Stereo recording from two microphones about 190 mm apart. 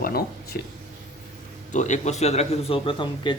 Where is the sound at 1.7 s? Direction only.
40° left (ahead or behind).